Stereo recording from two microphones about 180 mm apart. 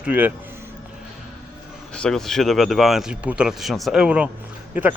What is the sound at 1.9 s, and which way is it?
A man's voice, 5° left (ahead or behind).